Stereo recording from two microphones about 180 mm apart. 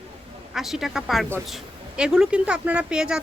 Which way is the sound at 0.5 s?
Centre (ahead or behind).